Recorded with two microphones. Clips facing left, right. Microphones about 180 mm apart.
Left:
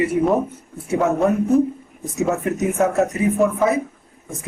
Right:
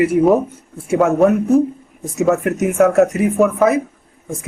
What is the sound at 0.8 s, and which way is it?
A man's voice, 80° right.